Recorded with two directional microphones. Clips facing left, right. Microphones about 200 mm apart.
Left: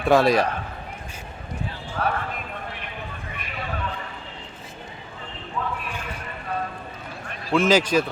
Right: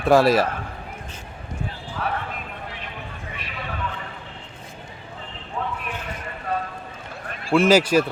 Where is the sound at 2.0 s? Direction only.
40° left (ahead or behind).